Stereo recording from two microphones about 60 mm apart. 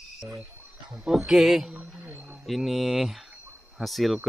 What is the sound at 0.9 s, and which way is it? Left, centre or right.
Speech, centre.